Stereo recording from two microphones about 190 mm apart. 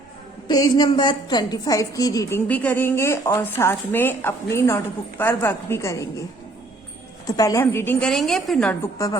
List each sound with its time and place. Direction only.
0.4 s a woman's voice: 20° left (ahead or behind)
2.5 s speech: 10° left (ahead or behind)
7.3 s speech: 20° left (ahead or behind)